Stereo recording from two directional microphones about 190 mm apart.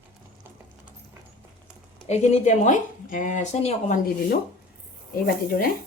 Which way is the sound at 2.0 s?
35° left (ahead or behind).